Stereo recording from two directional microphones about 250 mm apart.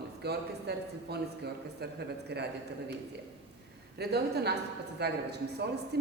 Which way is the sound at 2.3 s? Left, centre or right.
Right.